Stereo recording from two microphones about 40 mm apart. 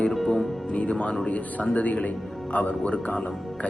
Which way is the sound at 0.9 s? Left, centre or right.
Left.